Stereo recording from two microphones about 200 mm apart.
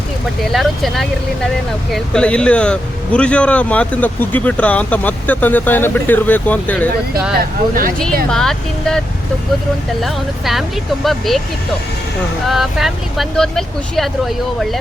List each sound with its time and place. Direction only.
0.5 s speech: centre (ahead or behind)
8.3 s speech: 5° left (ahead or behind)
10.0 s speech: centre (ahead or behind)
12.5 s speech: centre (ahead or behind)